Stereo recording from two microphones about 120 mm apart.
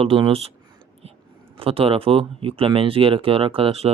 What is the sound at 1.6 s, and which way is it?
Speech, 50° right (ahead or behind).